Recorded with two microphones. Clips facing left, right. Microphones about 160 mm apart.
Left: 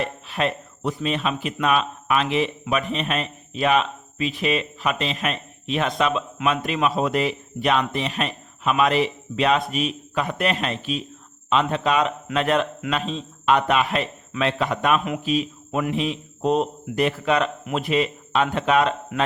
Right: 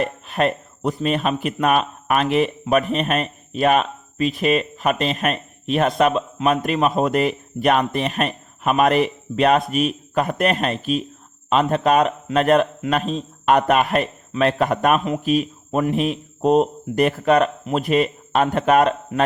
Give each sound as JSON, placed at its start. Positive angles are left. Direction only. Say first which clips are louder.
{"t": 0.0, "sound": "a man's voice", "louder": "right 4 dB", "side_deg": -50}
{"t": 15.2, "sound": "a man's voice", "louder": "right 4 dB", "side_deg": -50}